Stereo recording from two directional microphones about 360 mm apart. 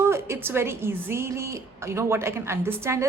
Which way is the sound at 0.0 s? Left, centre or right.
Centre.